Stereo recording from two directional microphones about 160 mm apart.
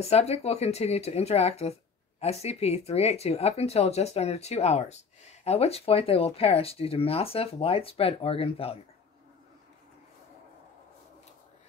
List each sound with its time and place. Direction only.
0.0 s speech: 40° left (ahead or behind)